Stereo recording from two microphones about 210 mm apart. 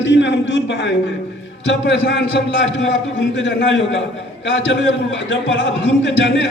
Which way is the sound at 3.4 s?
60° left (ahead or behind).